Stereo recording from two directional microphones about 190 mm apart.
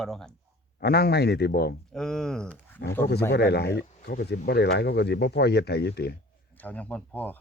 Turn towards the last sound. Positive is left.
turn(degrees=10)  # may be behind; listen again after turning